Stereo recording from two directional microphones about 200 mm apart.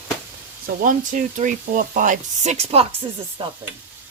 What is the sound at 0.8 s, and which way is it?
Speech, 40° right (ahead or behind).